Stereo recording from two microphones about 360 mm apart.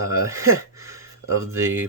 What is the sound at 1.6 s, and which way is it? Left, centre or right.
Speech, centre.